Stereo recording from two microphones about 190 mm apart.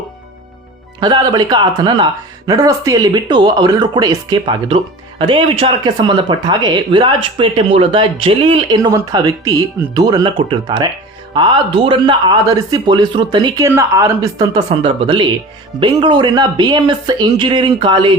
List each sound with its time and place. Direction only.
0.9 s speech: 25° right (ahead or behind)